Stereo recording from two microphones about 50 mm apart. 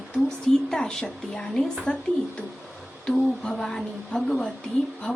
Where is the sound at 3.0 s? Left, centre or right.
Centre.